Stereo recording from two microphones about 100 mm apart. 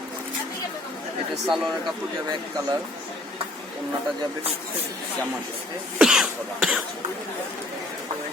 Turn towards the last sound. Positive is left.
turn(degrees=-10)  # may be behind; listen again after turning